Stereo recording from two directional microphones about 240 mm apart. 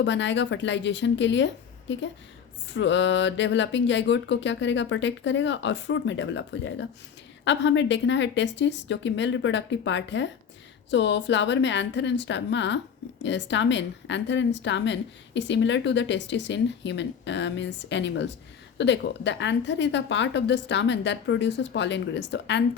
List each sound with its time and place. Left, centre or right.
0.0 s speech: left